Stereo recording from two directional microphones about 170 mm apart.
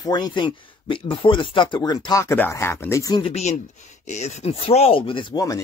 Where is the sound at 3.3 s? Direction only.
40° left (ahead or behind); by 5.6 s 20° left (ahead or behind).